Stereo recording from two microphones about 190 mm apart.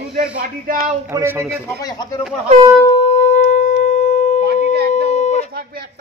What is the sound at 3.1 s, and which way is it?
Shofar, 35° left (ahead or behind).